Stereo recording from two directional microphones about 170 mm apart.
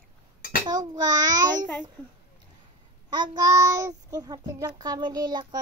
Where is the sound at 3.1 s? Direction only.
25° right (ahead or behind).